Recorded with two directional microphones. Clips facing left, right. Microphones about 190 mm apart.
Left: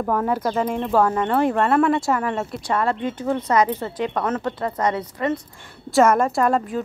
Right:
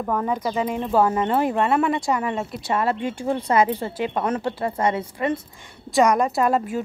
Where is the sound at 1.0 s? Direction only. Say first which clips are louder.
Left 1 dB; 20° right (ahead or behind).